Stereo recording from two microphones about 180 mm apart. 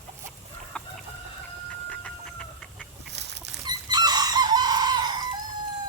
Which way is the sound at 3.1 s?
70° right (ahead or behind).